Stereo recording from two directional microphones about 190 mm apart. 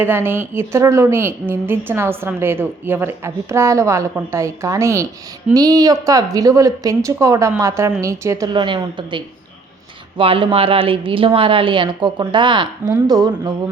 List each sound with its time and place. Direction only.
0.0 s a woman's voice: 10° right (ahead or behind)